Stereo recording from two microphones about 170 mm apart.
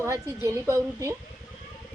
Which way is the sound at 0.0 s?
15° right (ahead or behind).